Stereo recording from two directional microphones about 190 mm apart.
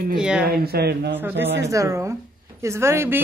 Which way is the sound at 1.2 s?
10° right (ahead or behind).